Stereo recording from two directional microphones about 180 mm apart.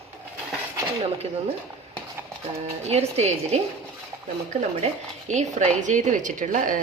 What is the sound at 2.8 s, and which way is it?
Speech, 35° right (ahead or behind).